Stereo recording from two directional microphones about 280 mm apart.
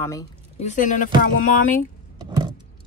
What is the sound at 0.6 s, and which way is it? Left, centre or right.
Speech, left.